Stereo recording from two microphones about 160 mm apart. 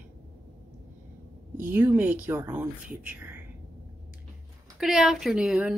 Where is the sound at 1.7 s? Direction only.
10° right (ahead or behind).